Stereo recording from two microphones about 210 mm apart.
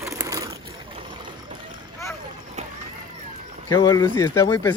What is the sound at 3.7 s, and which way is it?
Speech, 15° left (ahead or behind).